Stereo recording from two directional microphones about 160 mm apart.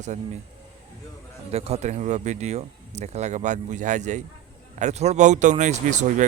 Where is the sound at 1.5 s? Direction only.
40° right (ahead or behind).